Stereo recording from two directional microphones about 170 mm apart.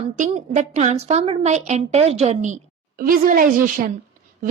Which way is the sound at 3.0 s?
55° right (ahead or behind).